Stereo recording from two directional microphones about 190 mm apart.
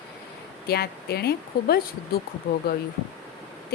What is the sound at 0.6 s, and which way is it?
Speech, 55° left (ahead or behind).